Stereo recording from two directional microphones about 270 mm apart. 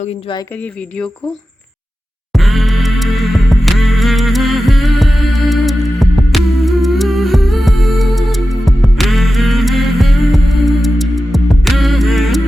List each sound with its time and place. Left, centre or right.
0.0 s speech: centre
0.5 s speech: centre
2.3 s music: centre